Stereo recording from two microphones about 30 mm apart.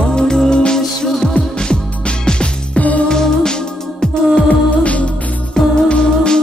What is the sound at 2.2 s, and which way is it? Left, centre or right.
Music, left.